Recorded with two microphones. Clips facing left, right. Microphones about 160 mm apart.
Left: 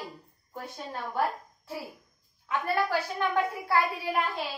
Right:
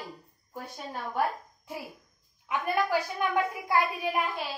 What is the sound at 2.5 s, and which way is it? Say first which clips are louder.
A woman's voice: even; 15° right (ahead or behind).